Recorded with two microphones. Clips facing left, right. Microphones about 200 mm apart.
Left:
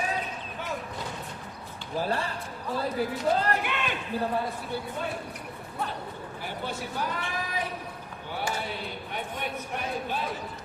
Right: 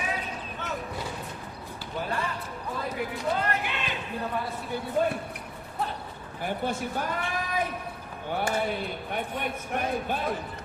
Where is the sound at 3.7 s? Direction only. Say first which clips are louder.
Left 2 dB; 55° left (ahead or behind).